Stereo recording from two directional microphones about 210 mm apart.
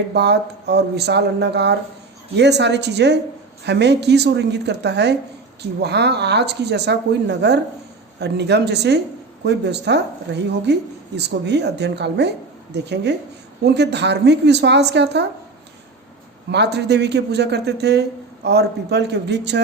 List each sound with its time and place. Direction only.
0.1 s speech: 55° right (ahead or behind)
16.5 s speech: 55° right (ahead or behind)